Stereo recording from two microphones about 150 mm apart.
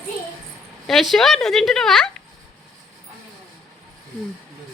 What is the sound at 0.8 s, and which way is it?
Speech, centre (ahead or behind).